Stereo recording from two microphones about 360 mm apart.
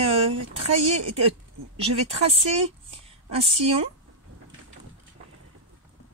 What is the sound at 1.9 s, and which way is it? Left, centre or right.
Speech, centre.